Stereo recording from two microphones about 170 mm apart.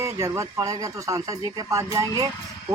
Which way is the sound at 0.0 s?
15° right (ahead or behind).